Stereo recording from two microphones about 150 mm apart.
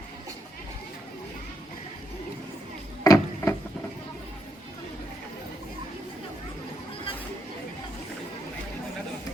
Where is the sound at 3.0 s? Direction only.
25° left (ahead or behind).